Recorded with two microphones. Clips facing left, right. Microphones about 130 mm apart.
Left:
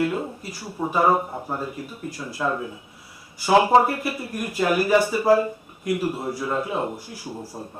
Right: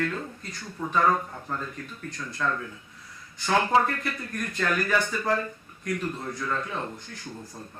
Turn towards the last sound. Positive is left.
turn(degrees=35)  # may be behind; listen again after turning